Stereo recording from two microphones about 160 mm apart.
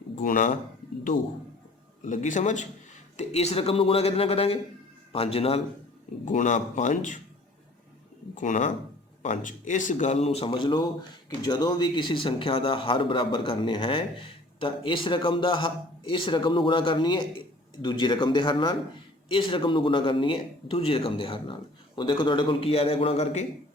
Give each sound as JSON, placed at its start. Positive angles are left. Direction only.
{"t": 0.2, "sound": "speech", "side_deg": 55}
{"t": 2.0, "sound": "a man's voice", "side_deg": 50}
{"t": 6.2, "sound": "speech", "side_deg": 50}
{"t": 8.4, "sound": "a man's voice", "side_deg": 50}